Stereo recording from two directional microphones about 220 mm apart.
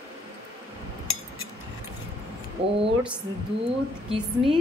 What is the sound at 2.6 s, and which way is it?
Speech, 25° right (ahead or behind).